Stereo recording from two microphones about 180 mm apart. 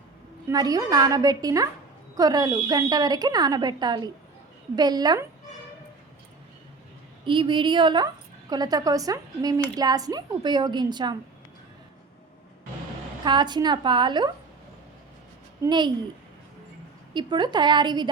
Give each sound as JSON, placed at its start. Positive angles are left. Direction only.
{"t": 0.4, "sound": "a woman's voice", "side_deg": -20}
{"t": 7.3, "sound": "a woman's voice", "side_deg": -25}
{"t": 13.2, "sound": "a woman's voice", "side_deg": -25}
{"t": 15.6, "sound": "a woman's voice", "side_deg": -25}
{"t": 17.2, "sound": "a woman's voice", "side_deg": -25}